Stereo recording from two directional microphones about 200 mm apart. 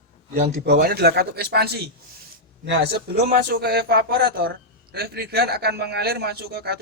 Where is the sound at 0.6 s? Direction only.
50° right (ahead or behind).